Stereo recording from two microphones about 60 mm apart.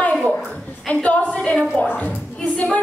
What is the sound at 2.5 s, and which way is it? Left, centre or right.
Music, centre.